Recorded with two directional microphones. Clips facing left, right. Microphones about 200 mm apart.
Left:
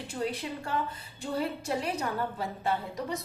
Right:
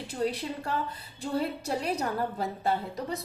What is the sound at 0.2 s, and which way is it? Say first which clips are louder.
A woman's voice: right 3 dB; 35° right (ahead or behind).